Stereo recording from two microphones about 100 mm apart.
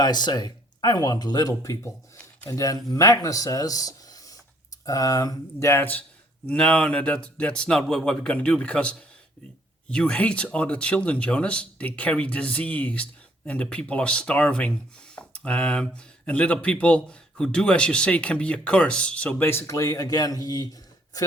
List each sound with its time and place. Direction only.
0.0 s speech: 45° left (ahead or behind); by 19.5 s 15° left (ahead or behind)
19.5 s speech: 30° left (ahead or behind)